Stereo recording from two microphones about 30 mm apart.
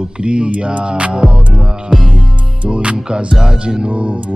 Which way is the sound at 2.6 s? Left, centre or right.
Right.